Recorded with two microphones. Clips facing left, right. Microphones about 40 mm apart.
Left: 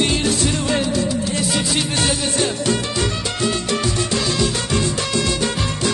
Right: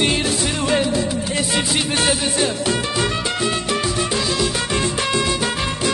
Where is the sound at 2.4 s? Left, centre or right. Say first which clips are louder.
Even; centre.